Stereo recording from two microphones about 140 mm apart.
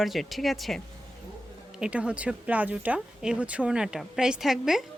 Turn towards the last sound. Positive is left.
turn(degrees=-5)  # may be behind; listen again after turning